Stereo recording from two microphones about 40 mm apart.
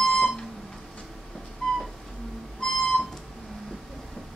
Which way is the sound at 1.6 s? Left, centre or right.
Centre.